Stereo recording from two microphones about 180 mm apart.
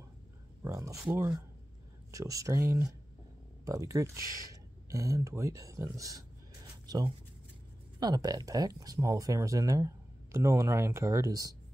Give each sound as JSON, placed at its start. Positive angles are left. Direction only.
{"t": 0.7, "sound": "speech", "side_deg": -15}
{"t": 8.0, "sound": "speech", "side_deg": -20}